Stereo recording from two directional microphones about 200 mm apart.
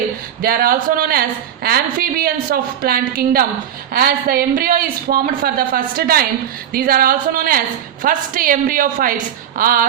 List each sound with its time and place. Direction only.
0.4 s speech: 45° right (ahead or behind)